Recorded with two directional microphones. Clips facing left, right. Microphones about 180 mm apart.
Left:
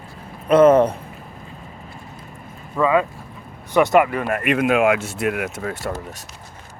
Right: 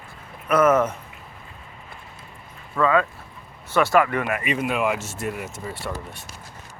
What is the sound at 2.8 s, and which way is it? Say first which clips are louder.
Speech: left 2 dB; 15° left (ahead or behind).